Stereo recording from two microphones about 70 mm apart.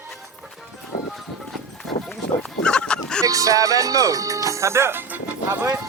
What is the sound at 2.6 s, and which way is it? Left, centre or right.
Goose, centre.